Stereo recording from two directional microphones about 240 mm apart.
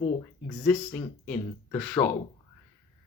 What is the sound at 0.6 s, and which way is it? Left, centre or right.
Speech, centre.